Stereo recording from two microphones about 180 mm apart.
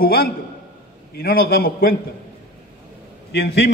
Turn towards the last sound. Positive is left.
turn(degrees=65)  # may be behind; listen again after turning